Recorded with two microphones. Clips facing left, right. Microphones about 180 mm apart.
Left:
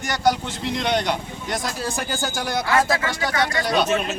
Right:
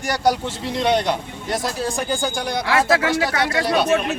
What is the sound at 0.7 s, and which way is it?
Speech, 30° right (ahead or behind).